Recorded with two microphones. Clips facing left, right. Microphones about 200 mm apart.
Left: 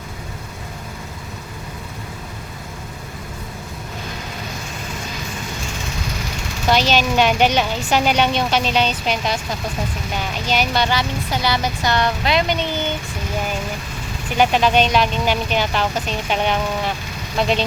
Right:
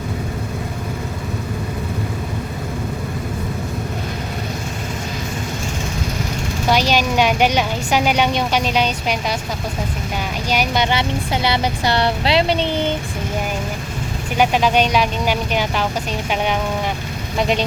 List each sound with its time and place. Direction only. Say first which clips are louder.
6.7 s a woman's voice: even; 10° right (ahead or behind)
10.5 s a woman's voice: even; 10° right (ahead or behind)
10.8 s speech: right 2 dB; 25° right (ahead or behind)
14.3 s a woman's voice: even; 10° right (ahead or behind)